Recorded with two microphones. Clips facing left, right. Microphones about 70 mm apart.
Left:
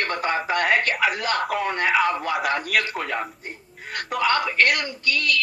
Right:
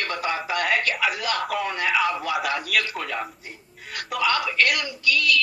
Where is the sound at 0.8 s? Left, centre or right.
Left.